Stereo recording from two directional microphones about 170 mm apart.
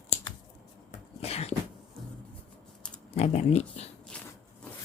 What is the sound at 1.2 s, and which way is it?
Beatboxing, 35° left (ahead or behind).